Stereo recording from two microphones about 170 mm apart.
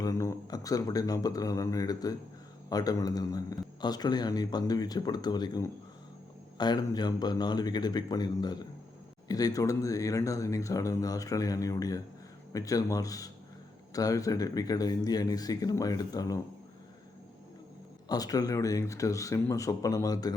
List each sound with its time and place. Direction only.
0.0 s a man's voice: 20° left (ahead or behind)
18.1 s a man's voice: 20° left (ahead or behind)